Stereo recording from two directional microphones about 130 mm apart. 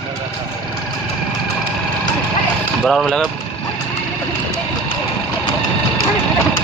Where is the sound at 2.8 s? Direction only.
5° left (ahead or behind).